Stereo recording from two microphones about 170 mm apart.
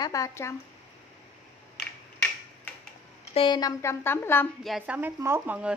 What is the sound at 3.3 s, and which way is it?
A woman's voice, 30° left (ahead or behind).